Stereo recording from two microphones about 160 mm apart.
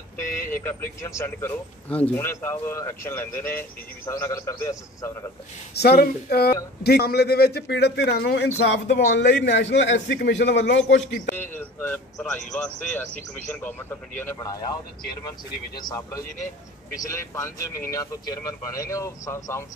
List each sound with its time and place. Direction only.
0.5 s speech: 15° left (ahead or behind)
5.8 s a man's voice: 75° left (ahead or behind)
11.3 s speech: 10° left (ahead or behind)
16.9 s speech: 20° left (ahead or behind)